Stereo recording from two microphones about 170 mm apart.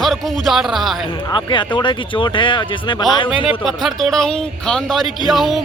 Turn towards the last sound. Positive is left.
turn(degrees=0)  # may be behind; listen again after turning